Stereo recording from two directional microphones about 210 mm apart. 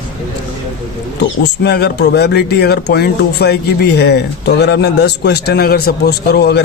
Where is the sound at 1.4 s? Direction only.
50° left (ahead or behind).